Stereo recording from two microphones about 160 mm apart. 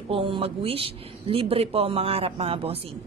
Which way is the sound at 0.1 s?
35° right (ahead or behind).